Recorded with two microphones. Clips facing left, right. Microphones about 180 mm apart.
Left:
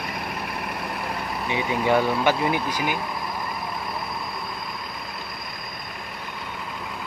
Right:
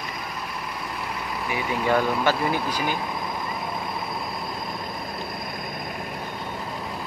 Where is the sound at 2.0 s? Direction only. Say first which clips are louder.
Left 1 dB; 15° left (ahead or behind).